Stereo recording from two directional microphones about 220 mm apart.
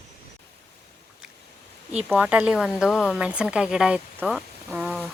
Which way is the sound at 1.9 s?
5° right (ahead or behind).